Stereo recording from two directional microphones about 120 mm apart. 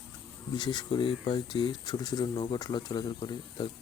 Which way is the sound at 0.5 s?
35° left (ahead or behind).